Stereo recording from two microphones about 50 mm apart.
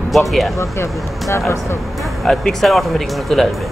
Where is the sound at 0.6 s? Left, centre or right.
Left.